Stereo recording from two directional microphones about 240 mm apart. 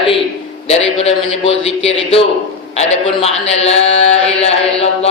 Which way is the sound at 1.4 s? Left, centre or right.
Left.